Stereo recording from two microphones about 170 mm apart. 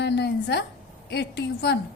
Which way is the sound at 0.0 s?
80° left.